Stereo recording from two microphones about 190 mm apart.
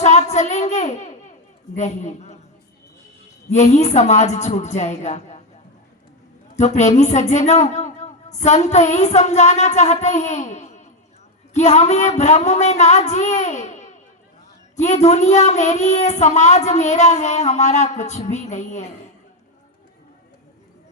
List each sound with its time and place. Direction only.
0.0 s child singing: 35° left (ahead or behind)
1.7 s a woman's voice: 35° left (ahead or behind)
3.5 s a woman's voice: 35° left (ahead or behind)
6.6 s a woman's voice: 35° left (ahead or behind)